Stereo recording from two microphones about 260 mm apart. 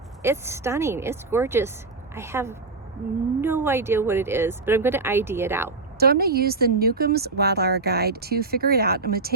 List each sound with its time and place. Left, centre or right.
0.2 s speech: centre
6.0 s speech: right